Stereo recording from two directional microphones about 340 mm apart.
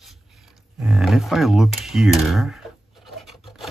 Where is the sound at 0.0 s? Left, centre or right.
Centre.